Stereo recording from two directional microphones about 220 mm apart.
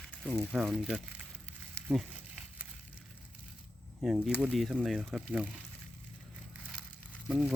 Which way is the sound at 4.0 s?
Centre (ahead or behind).